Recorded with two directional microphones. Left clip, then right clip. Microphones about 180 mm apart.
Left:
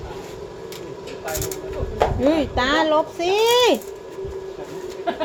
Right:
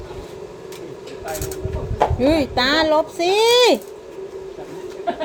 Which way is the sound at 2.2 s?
40° right (ahead or behind).